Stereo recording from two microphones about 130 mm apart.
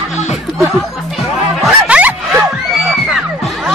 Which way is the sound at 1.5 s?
10° right (ahead or behind).